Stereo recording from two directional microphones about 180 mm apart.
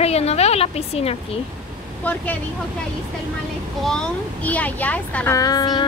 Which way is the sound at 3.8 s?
5° left (ahead or behind).